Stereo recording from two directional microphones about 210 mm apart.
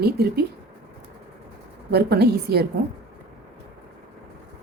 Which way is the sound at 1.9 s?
50° right (ahead or behind).